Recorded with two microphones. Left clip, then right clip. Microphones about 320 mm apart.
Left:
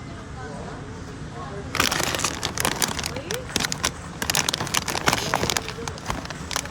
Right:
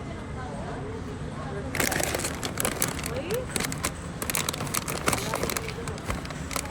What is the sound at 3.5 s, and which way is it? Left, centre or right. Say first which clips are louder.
Vehicle: left 5 dB; left.